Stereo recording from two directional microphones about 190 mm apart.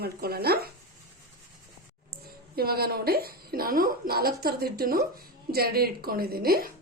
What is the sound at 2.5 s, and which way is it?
A woman's voice, 55° right (ahead or behind).